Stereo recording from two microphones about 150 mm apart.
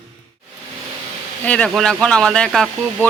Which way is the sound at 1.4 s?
5° left (ahead or behind).